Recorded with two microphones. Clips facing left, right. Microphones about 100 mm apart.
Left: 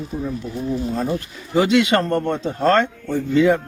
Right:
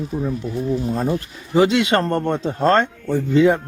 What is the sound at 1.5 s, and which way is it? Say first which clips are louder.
Speech: even; 30° right (ahead or behind).